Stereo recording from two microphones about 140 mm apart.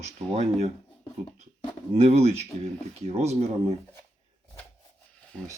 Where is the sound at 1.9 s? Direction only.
50° right (ahead or behind).